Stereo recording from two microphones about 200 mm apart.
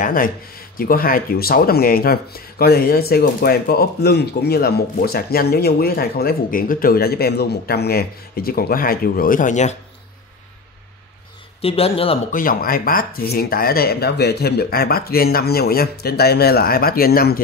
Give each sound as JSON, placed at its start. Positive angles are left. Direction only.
{"t": 0.0, "sound": "speech", "side_deg": 45}
{"t": 11.6, "sound": "speech", "side_deg": 30}
{"t": 12.3, "sound": "speech", "side_deg": 45}